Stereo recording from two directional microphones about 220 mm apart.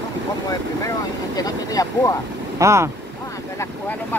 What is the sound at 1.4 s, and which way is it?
Speech, 15° left (ahead or behind).